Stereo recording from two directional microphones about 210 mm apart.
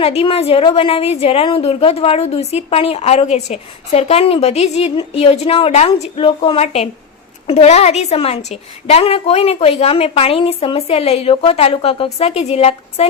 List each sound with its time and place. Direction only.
0.0 s a woman's voice: 30° left (ahead or behind)